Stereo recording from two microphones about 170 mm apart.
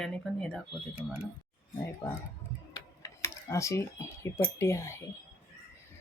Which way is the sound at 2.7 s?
20° left (ahead or behind).